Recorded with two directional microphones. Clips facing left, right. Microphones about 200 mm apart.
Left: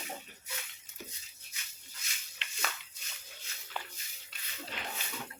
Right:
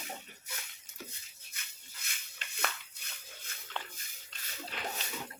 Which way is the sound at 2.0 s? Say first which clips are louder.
Even; 55° right (ahead or behind).